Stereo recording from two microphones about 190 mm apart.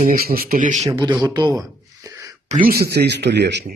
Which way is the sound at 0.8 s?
20° right (ahead or behind).